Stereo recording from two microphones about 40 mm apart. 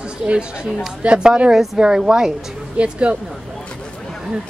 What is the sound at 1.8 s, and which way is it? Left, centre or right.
Speech, centre.